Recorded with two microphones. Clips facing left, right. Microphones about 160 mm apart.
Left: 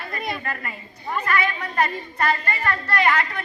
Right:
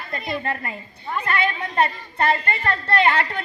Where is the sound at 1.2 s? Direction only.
25° right (ahead or behind).